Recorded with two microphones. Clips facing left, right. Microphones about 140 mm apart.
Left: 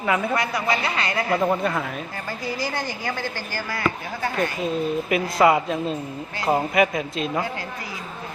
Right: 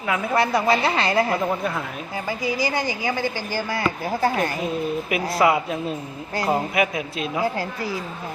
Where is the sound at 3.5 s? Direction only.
25° right (ahead or behind).